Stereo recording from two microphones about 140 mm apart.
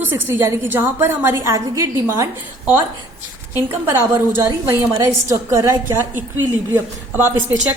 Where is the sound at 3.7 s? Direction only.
20° right (ahead or behind).